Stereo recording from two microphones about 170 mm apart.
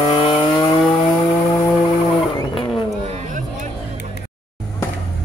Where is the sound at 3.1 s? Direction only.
45° right (ahead or behind).